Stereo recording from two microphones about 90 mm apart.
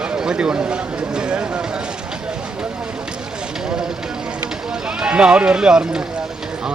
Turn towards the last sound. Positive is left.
turn(degrees=-10)  # may be behind; listen again after turning